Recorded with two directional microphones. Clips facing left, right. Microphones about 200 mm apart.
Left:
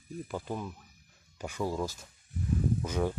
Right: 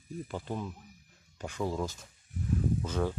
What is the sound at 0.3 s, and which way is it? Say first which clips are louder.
Speech: left 1 dB; 10° left (ahead or behind).